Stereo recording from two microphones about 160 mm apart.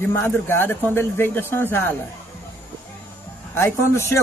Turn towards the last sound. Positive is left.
turn(degrees=15)  # may be behind; listen again after turning